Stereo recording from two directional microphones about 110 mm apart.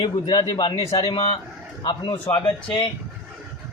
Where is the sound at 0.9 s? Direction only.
55° left (ahead or behind).